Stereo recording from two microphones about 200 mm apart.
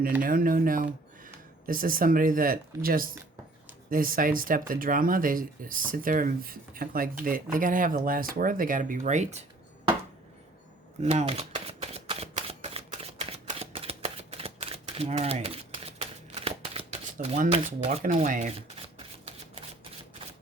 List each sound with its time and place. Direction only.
0.2 s speech: 45° right (ahead or behind)
11.0 s shuffling cards: 30° right (ahead or behind)
18.0 s speech: 40° right (ahead or behind)